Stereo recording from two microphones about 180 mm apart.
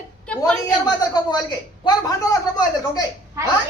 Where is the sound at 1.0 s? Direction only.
25° left (ahead or behind).